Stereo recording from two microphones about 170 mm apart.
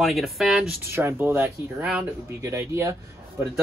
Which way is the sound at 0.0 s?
Centre (ahead or behind).